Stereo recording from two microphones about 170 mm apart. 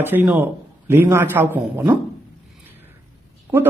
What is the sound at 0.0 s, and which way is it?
Speech, 10° right (ahead or behind).